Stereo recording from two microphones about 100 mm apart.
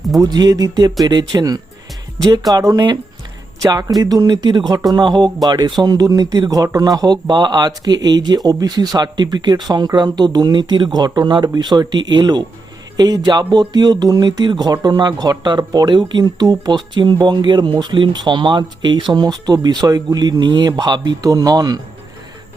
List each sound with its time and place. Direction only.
0.2 s speech: 40° right (ahead or behind)